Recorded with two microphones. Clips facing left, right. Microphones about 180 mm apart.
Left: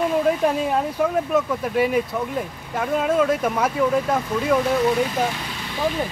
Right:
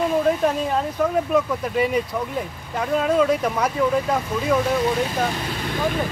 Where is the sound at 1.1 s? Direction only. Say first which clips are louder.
Right 1 dB; centre (ahead or behind).